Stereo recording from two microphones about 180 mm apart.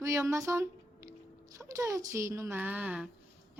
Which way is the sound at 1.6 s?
20° right (ahead or behind).